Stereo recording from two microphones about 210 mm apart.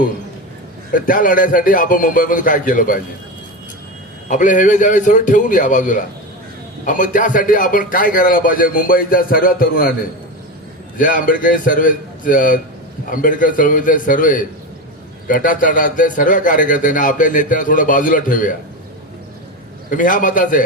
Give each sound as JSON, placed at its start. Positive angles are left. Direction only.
{"t": 0.9, "sound": "speech", "side_deg": 40}
{"t": 4.3, "sound": "speech", "side_deg": 35}
{"t": 10.9, "sound": "speech", "side_deg": 40}
{"t": 19.9, "sound": "speech", "side_deg": 40}